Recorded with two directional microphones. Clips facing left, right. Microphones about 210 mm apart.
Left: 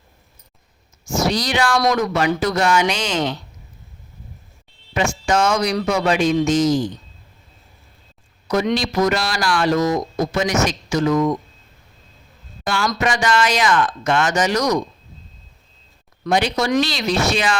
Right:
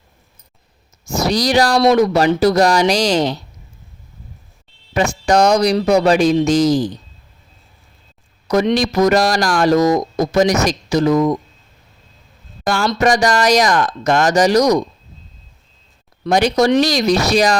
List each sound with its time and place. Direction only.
1.0 s a man's voice: 35° right (ahead or behind)
4.9 s a man's voice: 35° right (ahead or behind)
8.4 s a man's voice: 40° right (ahead or behind)
12.6 s a man's voice: 40° right (ahead or behind)
16.2 s a man's voice: 40° right (ahead or behind)